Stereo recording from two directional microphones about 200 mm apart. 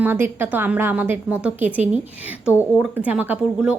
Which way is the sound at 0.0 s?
10° right (ahead or behind).